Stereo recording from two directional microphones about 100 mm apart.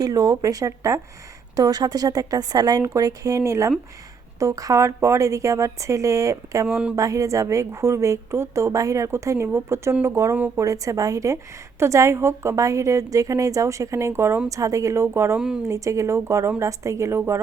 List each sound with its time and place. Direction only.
0.0 s a woman's voice: 35° right (ahead or behind)
6.7 s speech: 5° right (ahead or behind)
6.9 s a woman's voice: 35° right (ahead or behind)
10.3 s speech: 15° right (ahead or behind)
10.6 s a woman's voice: 35° right (ahead or behind)
15.4 s speech: 5° right (ahead or behind)
15.6 s speech: 30° right (ahead or behind)